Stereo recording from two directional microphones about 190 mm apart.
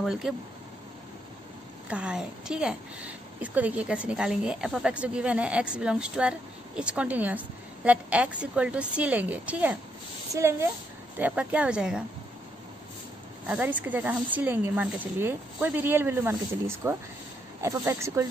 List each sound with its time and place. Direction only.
0.0 s speech: centre (ahead or behind)
1.9 s a woman's voice: 5° right (ahead or behind)
13.5 s speech: 10° right (ahead or behind)